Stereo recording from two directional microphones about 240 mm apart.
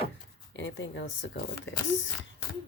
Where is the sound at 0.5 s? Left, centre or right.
Left.